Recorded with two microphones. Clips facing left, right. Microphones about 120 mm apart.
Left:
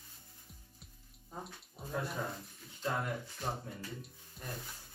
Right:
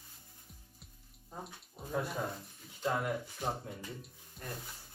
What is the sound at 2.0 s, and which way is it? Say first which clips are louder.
Speech: right 1 dB; centre (ahead or behind).